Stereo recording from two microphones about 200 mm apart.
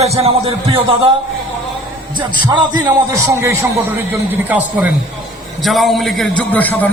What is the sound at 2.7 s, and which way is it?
A man's voice, 15° right (ahead or behind).